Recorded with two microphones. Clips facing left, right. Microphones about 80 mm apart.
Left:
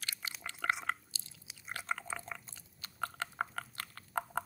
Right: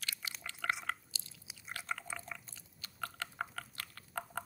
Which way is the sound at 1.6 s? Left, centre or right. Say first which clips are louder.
Left 3 dB; left.